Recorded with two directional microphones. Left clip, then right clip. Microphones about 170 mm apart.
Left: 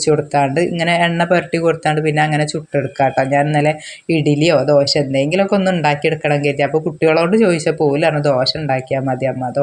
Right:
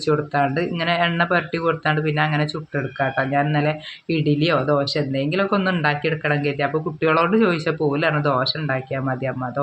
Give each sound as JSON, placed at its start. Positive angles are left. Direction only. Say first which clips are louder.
{"t": 0.0, "sound": "speech", "louder": "left 5 dB", "side_deg": 25}